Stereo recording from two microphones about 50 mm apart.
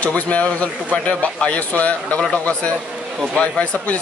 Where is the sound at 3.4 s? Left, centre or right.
Left.